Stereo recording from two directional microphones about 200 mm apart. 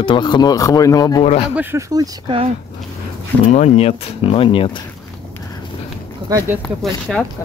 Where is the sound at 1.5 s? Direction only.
10° right (ahead or behind).